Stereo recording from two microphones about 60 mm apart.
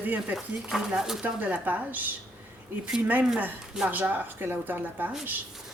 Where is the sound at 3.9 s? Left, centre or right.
Right.